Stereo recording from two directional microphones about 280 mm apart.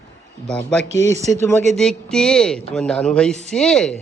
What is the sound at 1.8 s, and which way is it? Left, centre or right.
A woman's voice, centre.